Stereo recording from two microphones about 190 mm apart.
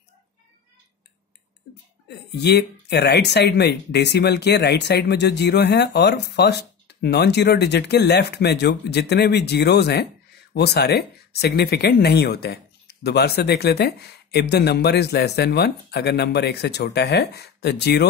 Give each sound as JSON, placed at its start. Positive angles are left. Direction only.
{"t": 2.0, "sound": "speech", "side_deg": 60}